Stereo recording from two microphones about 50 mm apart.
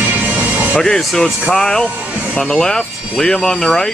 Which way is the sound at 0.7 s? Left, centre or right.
Centre.